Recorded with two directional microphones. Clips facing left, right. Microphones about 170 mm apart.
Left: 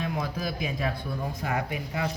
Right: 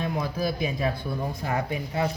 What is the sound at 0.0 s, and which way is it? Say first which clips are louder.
Speech: right 3 dB; 30° right (ahead or behind).